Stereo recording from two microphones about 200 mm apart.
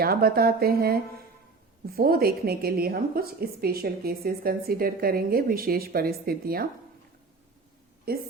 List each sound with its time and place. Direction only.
0.0 s a woman's voice: 50° right (ahead or behind)
8.1 s a woman's voice: 50° right (ahead or behind)